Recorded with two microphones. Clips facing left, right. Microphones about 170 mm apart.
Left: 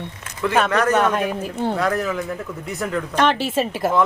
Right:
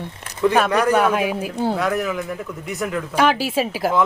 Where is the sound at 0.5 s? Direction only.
10° right (ahead or behind).